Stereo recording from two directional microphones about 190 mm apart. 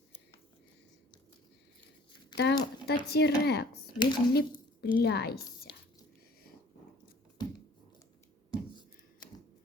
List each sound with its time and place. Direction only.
2.3 s speech: 60° left (ahead or behind)
3.9 s speech: 25° left (ahead or behind)
4.4 s a woman's voice: 50° left (ahead or behind)
7.4 s a sound: 20° left (ahead or behind)